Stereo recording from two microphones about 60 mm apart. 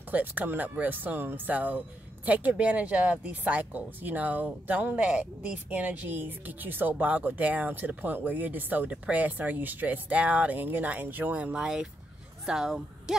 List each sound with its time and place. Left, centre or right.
0.1 s speech: right; by 13.1 s centre